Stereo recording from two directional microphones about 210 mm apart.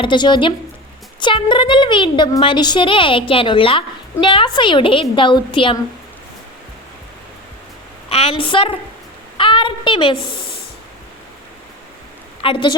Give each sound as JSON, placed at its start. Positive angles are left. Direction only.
{"t": 0.0, "sound": "a woman's voice", "side_deg": 20}
{"t": 8.1, "sound": "a woman's voice", "side_deg": 25}
{"t": 12.4, "sound": "a woman's voice", "side_deg": 25}